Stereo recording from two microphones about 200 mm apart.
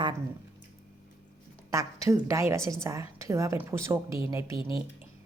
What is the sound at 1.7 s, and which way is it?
A woman's voice, 15° right (ahead or behind).